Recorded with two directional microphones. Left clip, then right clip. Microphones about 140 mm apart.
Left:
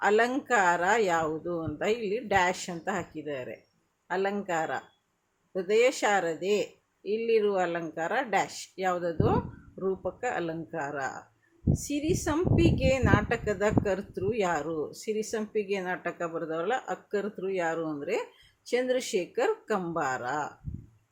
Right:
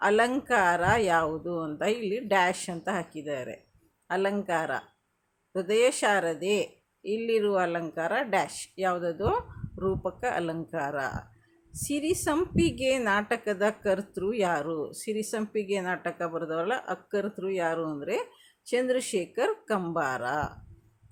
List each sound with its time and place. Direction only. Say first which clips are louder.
0.0 s a woman's voice: right 1 dB; 15° right (ahead or behind)